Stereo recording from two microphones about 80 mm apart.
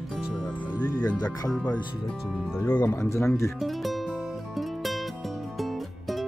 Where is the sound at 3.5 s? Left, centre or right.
Centre.